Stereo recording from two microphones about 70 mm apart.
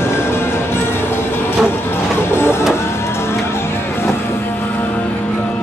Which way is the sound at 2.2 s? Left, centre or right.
Left.